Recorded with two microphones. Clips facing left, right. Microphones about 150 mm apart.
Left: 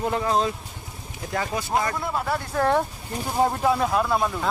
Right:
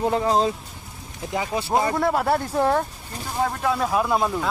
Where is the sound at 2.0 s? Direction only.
60° right (ahead or behind).